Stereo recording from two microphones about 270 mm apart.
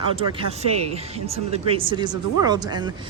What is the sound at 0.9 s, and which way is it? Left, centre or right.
Speech, right.